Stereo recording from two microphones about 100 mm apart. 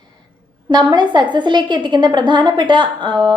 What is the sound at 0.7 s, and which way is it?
A woman's voice, 45° right (ahead or behind).